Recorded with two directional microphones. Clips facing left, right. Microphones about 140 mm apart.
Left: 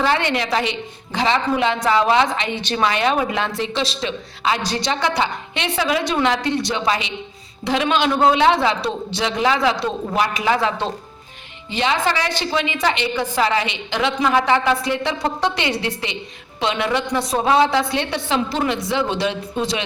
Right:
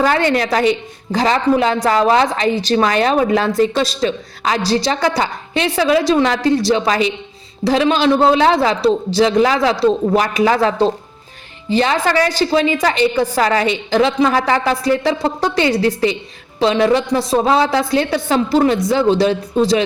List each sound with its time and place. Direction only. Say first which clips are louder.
0.0 s a woman's voice: right 5 dB; 40° right (ahead or behind)